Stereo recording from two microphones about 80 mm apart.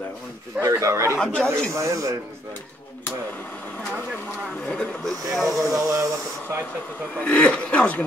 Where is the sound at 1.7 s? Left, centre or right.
Right.